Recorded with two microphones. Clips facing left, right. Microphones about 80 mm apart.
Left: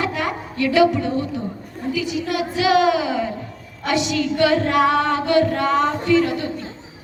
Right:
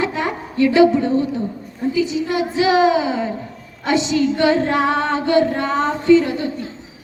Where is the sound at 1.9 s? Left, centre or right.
Right.